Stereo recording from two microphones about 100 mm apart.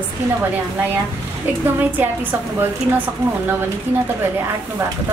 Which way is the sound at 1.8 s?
20° right (ahead or behind).